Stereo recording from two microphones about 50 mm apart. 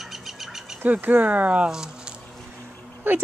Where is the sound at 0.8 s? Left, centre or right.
Right.